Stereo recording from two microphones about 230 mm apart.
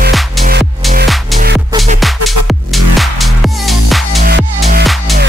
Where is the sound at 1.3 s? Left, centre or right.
Right.